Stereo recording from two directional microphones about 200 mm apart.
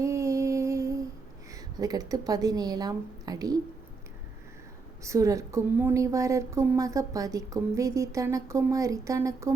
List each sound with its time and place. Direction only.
0.0 s a sound: 15° right (ahead or behind)
1.5 s a woman's voice: 20° right (ahead or behind)
5.0 s a woman's voice: 15° right (ahead or behind)